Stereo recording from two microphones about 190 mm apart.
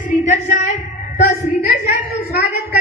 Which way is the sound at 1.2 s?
55° left (ahead or behind).